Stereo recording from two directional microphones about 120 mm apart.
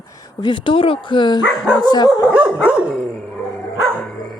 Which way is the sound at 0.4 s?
45° left (ahead or behind).